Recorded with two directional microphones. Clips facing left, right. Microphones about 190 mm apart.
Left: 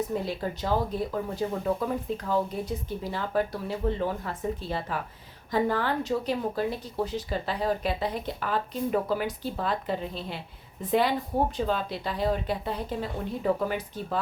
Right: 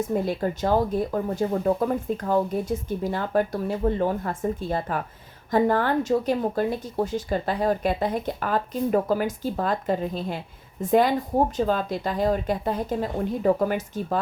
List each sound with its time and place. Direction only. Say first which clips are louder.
0.1 s speech: right 5 dB; 50° right (ahead or behind)